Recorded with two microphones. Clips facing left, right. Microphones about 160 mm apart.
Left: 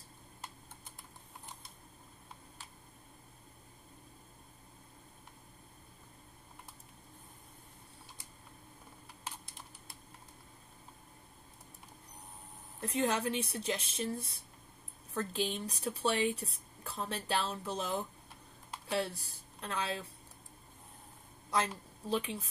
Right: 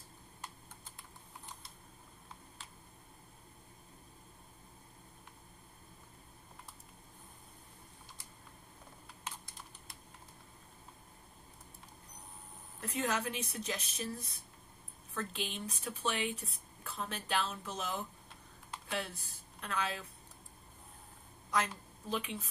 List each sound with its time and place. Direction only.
12.8 s a woman's voice: 30° left (ahead or behind)
22.1 s speech: 35° left (ahead or behind)